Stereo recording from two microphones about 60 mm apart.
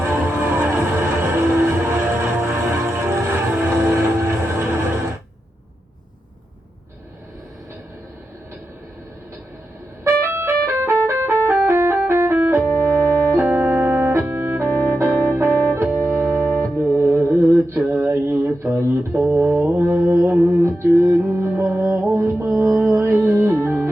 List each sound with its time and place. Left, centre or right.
0.0 s vehicle: right
0.7 s train: right
3.5 s vehicle: right
10.0 s music: right
12.3 s organ: right
14.8 s music: right
17.0 s mantra: right
20.1 s music: right
20.6 s music: right
20.8 s music: right